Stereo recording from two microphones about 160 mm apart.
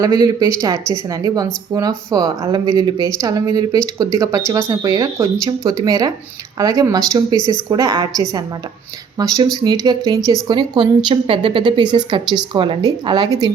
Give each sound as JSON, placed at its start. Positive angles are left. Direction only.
{"t": 0.0, "sound": "a woman's voice", "side_deg": -25}